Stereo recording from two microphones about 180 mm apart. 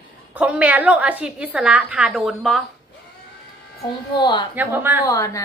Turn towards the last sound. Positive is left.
turn(degrees=20)  # may be behind; listen again after turning